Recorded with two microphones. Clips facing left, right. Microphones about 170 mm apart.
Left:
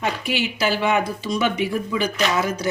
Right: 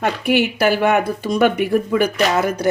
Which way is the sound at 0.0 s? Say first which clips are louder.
Right 7 dB; 55° right (ahead or behind).